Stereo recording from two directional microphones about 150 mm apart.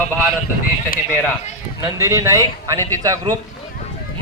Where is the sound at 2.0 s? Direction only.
20° right (ahead or behind).